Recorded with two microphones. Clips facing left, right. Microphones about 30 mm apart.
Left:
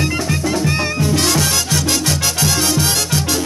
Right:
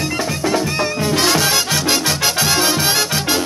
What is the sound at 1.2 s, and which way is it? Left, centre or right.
Music, centre.